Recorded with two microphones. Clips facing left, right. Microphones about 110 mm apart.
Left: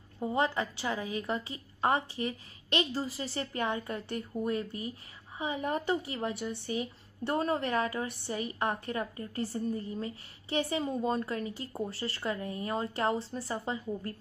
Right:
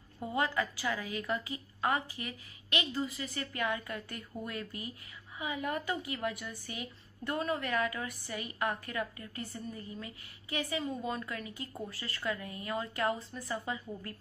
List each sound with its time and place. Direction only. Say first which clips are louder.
0.2 s a woman's voice: left 3 dB; 30° left (ahead or behind)